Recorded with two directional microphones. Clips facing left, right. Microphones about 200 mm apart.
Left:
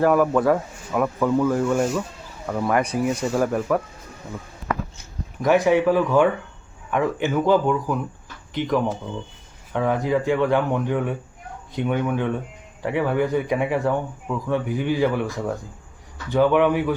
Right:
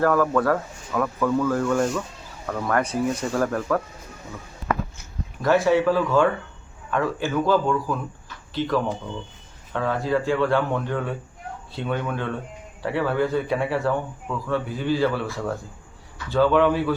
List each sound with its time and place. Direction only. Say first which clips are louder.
0.0 s speech: left 2 dB; 15° left (ahead or behind)
1.8 s speech: left 1 dB; 5° left (ahead or behind)
2.5 s speech: left 2 dB; 15° left (ahead or behind)
5.4 s speech: left 1 dB; 15° left (ahead or behind)